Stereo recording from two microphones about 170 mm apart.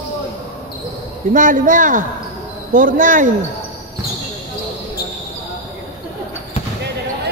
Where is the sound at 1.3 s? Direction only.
50° right (ahead or behind).